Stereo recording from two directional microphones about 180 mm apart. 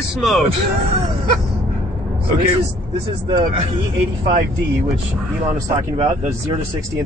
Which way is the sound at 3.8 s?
30° right (ahead or behind).